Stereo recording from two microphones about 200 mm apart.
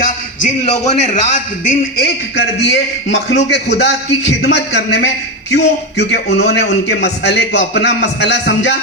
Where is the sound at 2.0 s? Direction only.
55° left (ahead or behind).